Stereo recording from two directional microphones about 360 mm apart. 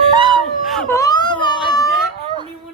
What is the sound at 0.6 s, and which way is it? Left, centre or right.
Whimper, centre.